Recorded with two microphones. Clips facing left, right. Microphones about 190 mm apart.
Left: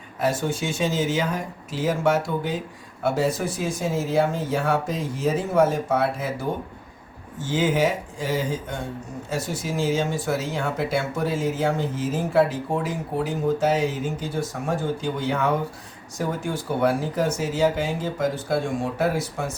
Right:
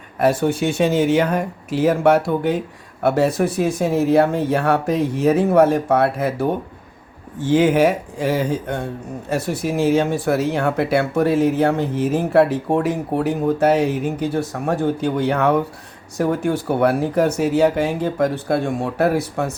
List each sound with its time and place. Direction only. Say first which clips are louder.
0.2 s speech: right 7 dB; 60° right (ahead or behind)